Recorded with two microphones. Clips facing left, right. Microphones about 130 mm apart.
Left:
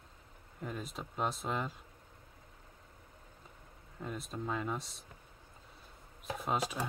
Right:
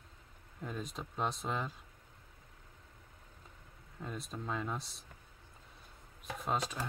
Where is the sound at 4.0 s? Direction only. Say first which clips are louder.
Left 2 dB; centre (ahead or behind).